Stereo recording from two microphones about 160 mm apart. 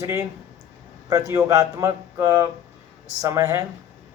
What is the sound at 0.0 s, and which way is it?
Speech, 20° right (ahead or behind).